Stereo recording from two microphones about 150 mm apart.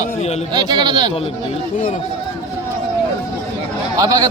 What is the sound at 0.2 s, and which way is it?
Speech, 45° left (ahead or behind).